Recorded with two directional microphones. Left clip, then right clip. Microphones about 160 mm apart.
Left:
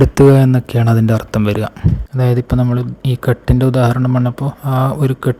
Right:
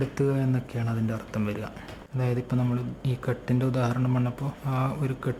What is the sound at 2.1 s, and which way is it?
Speech, 45° left (ahead or behind).